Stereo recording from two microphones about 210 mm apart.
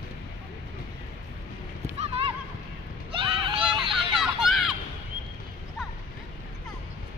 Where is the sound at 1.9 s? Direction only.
25° right (ahead or behind).